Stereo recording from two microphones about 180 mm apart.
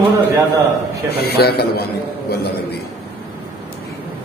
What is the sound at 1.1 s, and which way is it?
Speech, 60° left (ahead or behind).